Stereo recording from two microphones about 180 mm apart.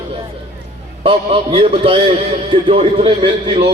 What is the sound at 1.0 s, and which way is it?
A man's voice, 30° right (ahead or behind).